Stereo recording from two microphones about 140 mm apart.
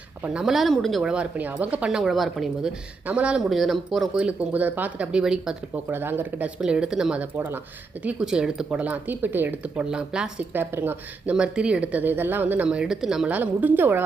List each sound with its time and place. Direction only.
0.2 s a woman's voice: 5° right (ahead or behind)